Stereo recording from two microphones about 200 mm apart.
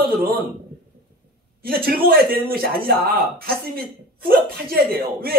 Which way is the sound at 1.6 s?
50° right (ahead or behind).